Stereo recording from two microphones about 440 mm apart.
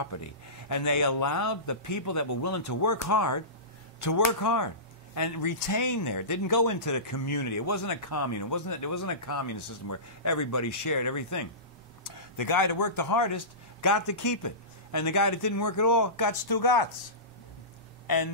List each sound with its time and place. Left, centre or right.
0.1 s speech: left
18.0 s speech: left